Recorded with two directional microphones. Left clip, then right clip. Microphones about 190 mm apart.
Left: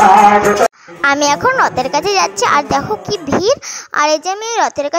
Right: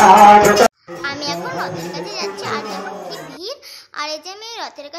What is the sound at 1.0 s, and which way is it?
A child's voice, 50° left (ahead or behind).